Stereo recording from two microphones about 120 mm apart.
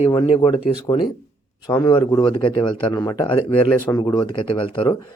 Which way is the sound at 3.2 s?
50° left (ahead or behind).